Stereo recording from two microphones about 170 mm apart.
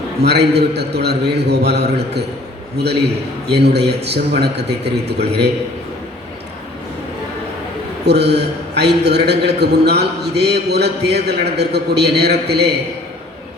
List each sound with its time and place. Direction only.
0.2 s a man's voice: 75° right (ahead or behind)
8.0 s a man's voice: 80° right